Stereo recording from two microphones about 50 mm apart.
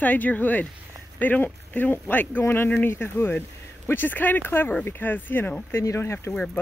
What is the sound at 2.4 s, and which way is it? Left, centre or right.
Speech, left.